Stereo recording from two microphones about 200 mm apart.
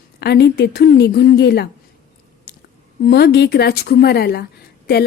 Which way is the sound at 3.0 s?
55° left (ahead or behind).